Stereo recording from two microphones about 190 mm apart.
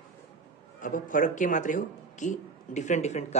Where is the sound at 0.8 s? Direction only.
45° left (ahead or behind).